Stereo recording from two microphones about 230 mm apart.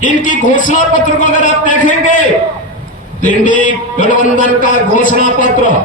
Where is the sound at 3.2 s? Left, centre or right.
Left.